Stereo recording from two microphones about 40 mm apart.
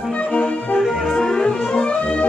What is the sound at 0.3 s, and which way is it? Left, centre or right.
Music, left.